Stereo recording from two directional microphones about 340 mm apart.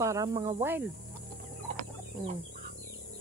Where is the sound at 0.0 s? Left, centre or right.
Centre.